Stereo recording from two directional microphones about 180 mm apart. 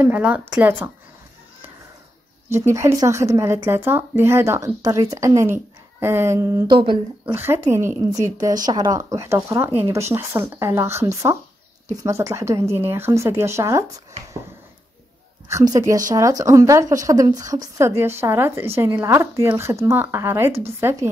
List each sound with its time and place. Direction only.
0.0 s speech: 10° right (ahead or behind)
2.5 s speech: 15° right (ahead or behind)
6.8 s speech: 25° right (ahead or behind)
7.3 s speech: 15° right (ahead or behind)
15.4 s speech: 20° right (ahead or behind)